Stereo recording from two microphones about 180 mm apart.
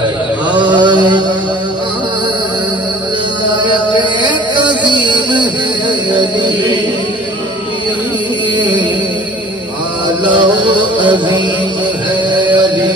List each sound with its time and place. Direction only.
0.6 s mantra: 25° right (ahead or behind)
3.6 s music: 25° right (ahead or behind)
8.5 s a sound: 25° right (ahead or behind)
10.2 s music: 25° right (ahead or behind)
12.4 s mantra: 25° right (ahead or behind)